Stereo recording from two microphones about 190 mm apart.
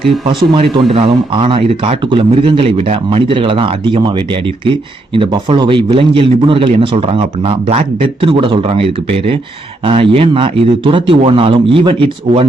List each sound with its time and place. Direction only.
0.5 s a man's voice: 30° right (ahead or behind)